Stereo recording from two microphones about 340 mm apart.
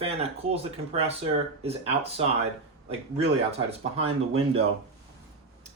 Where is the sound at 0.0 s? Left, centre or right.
Centre.